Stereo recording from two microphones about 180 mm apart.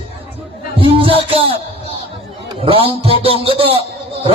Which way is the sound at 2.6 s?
30° right (ahead or behind).